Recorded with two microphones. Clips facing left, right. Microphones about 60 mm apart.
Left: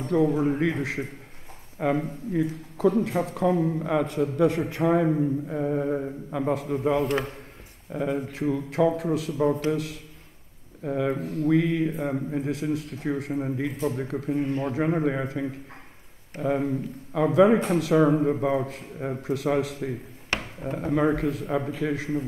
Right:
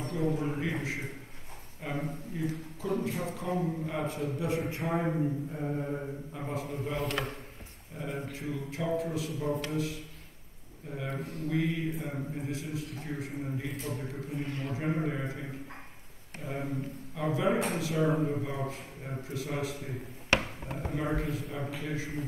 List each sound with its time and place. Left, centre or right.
0.0 s a man's voice: left
5.5 s mantra: left
6.3 s a man's voice: left